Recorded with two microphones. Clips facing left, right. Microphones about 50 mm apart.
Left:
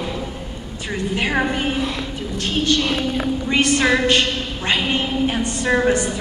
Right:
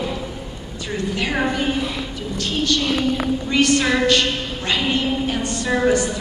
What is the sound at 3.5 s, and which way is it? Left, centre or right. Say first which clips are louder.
A woman's voice: left 1 dB; left.